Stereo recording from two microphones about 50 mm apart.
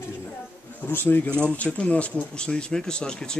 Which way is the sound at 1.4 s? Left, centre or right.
Left.